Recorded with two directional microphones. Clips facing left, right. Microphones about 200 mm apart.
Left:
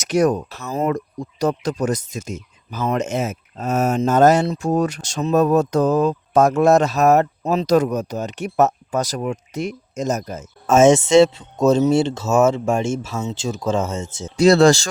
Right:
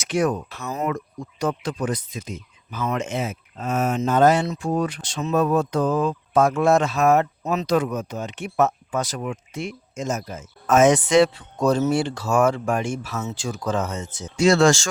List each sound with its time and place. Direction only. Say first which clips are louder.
0.0 s speech: left 5 dB; 40° left (ahead or behind)
10.7 s speech: left 4 dB; 25° left (ahead or behind)